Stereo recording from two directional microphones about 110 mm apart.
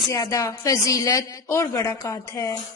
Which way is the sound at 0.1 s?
30° left (ahead or behind).